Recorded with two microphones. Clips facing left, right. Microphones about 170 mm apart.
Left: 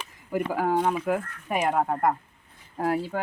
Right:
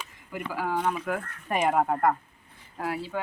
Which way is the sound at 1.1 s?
15° left (ahead or behind).